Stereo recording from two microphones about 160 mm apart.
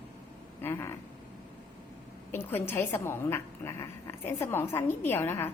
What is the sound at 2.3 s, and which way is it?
A woman's voice, 15° left (ahead or behind).